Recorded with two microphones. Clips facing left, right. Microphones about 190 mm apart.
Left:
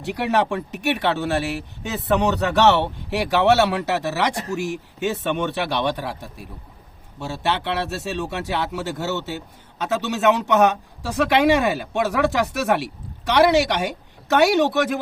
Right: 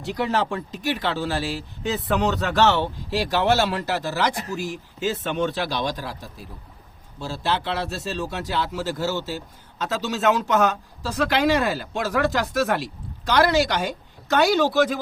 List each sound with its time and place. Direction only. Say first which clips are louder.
0.0 s speech: left 2 dB; 65° left (ahead or behind)